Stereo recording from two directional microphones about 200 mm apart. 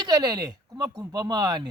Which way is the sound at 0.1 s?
20° right (ahead or behind).